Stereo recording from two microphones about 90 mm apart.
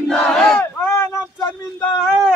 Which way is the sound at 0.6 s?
25° left (ahead or behind).